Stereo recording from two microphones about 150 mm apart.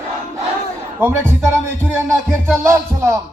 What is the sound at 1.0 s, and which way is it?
Music, 15° right (ahead or behind).